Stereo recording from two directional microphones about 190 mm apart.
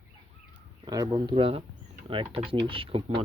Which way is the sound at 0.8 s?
20° right (ahead or behind).